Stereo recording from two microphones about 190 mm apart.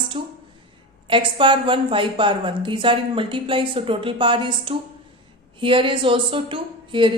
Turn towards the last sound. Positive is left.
turn(degrees=-25)  # may be behind; listen again after turning